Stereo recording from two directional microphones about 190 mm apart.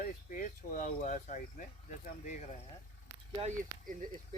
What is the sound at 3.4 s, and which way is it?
Speech, 40° right (ahead or behind).